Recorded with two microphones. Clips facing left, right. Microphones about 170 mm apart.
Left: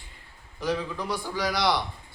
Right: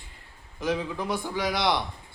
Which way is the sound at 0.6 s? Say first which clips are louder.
Right 1 dB; 20° right (ahead or behind).